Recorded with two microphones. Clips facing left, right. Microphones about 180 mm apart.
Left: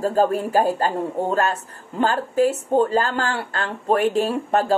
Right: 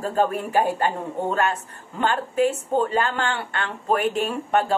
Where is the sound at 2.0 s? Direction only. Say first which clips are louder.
Left 2 dB; 35° left (ahead or behind).